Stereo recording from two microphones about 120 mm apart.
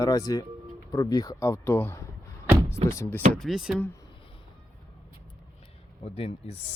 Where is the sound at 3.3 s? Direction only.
Centre (ahead or behind).